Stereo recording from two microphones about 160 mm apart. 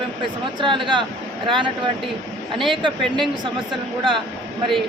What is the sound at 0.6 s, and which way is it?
Speech, 30° right (ahead or behind).